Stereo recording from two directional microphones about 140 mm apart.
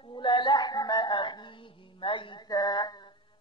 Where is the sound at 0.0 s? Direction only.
35° left (ahead or behind).